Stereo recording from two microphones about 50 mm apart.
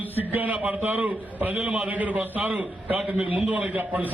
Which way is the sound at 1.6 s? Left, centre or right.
Right.